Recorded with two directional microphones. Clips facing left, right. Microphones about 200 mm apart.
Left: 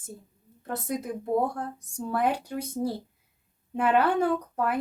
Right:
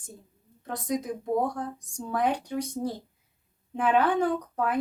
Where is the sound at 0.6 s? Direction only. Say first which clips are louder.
Right 1 dB; 5° left (ahead or behind).